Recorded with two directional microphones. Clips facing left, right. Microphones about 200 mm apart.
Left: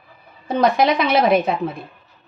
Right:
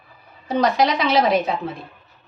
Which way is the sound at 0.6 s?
55° left (ahead or behind).